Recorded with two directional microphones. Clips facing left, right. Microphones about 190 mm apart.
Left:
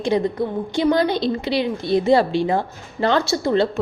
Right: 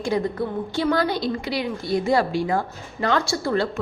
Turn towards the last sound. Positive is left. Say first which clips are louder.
# left 4 dB
turn(degrees=20)  # may be behind; listen again after turning